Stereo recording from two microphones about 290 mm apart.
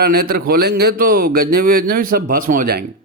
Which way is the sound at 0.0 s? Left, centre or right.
Right.